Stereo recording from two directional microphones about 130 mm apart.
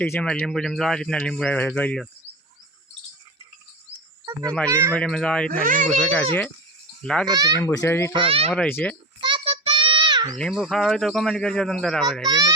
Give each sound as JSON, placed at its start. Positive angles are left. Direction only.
{"t": 0.0, "sound": "speech", "side_deg": 15}
{"t": 0.3, "sound": "speech", "side_deg": 5}
{"t": 4.4, "sound": "speech", "side_deg": 5}
{"t": 4.7, "sound": "speech", "side_deg": -20}
{"t": 4.9, "sound": "speech", "side_deg": 5}
{"t": 5.6, "sound": "speech", "side_deg": -90}
{"t": 7.0, "sound": "a child's voice", "side_deg": 5}
{"t": 7.3, "sound": "speech", "side_deg": -30}
{"t": 7.6, "sound": "a child's voice", "side_deg": 25}
{"t": 8.2, "sound": "a child's voice", "side_deg": -45}
{"t": 8.4, "sound": "speech", "side_deg": 10}
{"t": 9.2, "sound": "child singing", "side_deg": -45}
{"t": 10.5, "sound": "speech", "side_deg": 0}
{"t": 12.3, "sound": "speech", "side_deg": -25}